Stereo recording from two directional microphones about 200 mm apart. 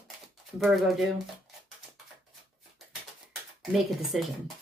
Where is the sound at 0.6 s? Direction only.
Centre (ahead or behind).